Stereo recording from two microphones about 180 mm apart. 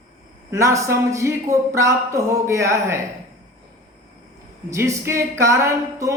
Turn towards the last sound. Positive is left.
turn(degrees=-15)  # may be behind; listen again after turning